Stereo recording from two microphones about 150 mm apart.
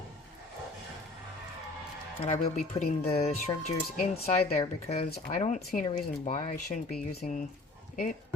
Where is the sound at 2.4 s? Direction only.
65° left (ahead or behind).